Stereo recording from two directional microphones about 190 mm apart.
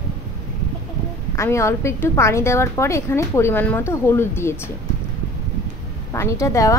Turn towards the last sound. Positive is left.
turn(degrees=15)  # may be behind; listen again after turning